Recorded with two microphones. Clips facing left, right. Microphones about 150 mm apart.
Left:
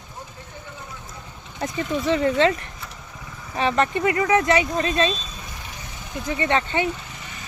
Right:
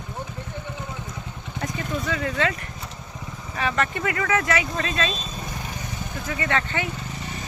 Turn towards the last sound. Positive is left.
turn(degrees=20)  # may be behind; listen again after turning